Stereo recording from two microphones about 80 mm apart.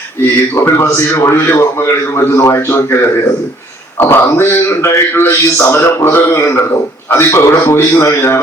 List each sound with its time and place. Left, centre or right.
0.5 s a man's voice: left